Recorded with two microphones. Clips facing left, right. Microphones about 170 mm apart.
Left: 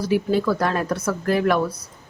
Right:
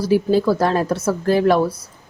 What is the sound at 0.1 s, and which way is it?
A woman's voice, 35° right (ahead or behind).